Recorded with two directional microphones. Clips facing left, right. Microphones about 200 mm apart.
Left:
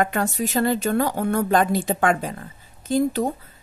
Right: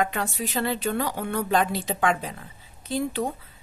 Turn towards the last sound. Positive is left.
turn(degrees=45)  # may be behind; listen again after turning